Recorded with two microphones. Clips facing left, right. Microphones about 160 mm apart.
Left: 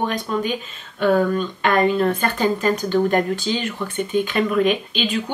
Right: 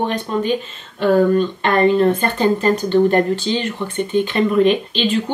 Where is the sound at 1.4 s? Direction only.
10° left (ahead or behind).